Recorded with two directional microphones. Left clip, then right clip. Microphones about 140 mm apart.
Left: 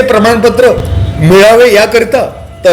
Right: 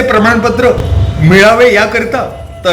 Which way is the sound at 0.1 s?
40° left (ahead or behind).